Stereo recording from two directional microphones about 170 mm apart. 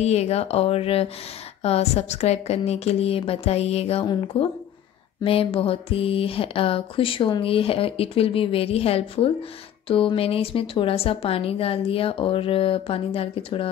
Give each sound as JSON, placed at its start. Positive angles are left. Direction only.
{"t": 0.0, "sound": "speech", "side_deg": 40}